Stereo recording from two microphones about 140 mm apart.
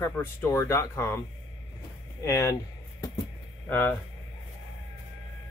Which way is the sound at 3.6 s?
15° left (ahead or behind).